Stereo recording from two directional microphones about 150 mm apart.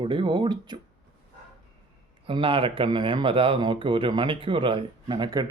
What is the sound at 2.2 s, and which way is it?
Speech, 35° right (ahead or behind).